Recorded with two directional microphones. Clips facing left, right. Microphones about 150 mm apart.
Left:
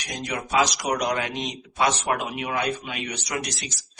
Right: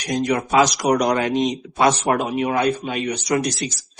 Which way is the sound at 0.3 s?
50° right (ahead or behind).